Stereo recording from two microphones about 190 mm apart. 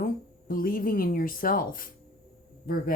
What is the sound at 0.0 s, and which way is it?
A woman's voice, 50° left (ahead or behind).